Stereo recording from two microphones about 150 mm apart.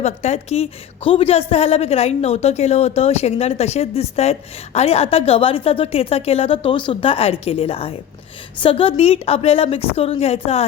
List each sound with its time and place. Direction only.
0.0 s a woman's voice: 45° left (ahead or behind)